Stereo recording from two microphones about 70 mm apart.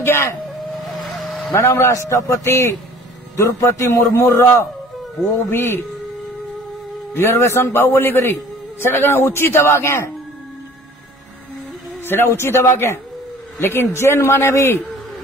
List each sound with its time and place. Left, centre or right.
0.0 s speech: left
0.7 s vehicle: centre
1.5 s a man's voice: left
7.2 s a man's voice: left
12.0 s a man's voice: left